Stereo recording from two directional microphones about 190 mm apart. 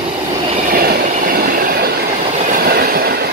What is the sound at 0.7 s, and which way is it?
Train, 45° right (ahead or behind).